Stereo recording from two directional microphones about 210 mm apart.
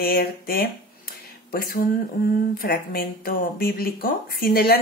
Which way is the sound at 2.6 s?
45° left (ahead or behind).